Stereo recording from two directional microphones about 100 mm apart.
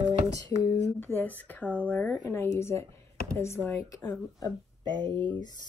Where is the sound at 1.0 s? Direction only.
20° left (ahead or behind).